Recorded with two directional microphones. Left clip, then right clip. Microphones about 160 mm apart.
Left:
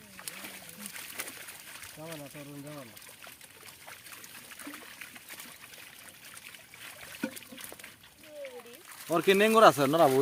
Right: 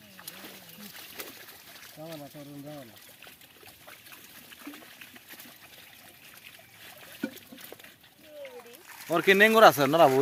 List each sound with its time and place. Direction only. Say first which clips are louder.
9.0 s speech: right 4 dB; centre (ahead or behind)